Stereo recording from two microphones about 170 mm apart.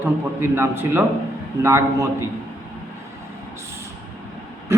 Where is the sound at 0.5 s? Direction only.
15° right (ahead or behind).